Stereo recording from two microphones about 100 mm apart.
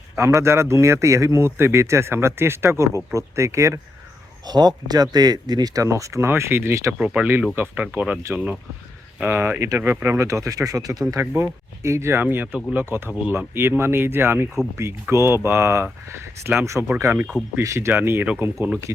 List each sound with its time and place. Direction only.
0.2 s speech: 30° right (ahead or behind)
4.4 s speech: 45° right (ahead or behind); by 6.9 s 25° right (ahead or behind)
7.0 s speech: 10° right (ahead or behind)
7.9 s speech: 10° right (ahead or behind)
9.2 s speech: 20° right (ahead or behind)